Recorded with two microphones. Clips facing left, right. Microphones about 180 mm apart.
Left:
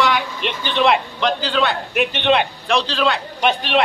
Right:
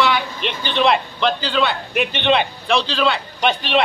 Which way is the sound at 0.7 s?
Centre (ahead or behind).